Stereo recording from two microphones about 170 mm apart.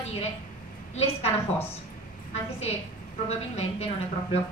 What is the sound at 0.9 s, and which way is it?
Speech, 35° left (ahead or behind).